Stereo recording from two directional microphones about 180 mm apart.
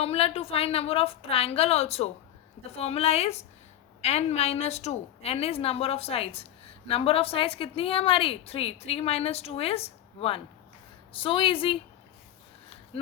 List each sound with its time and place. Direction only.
0.0 s a woman's voice: 35° left (ahead or behind)